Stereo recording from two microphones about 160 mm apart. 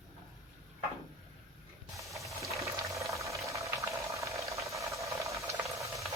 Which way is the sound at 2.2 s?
20° right (ahead or behind).